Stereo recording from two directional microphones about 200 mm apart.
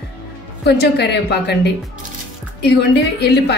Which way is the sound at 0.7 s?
55° left (ahead or behind).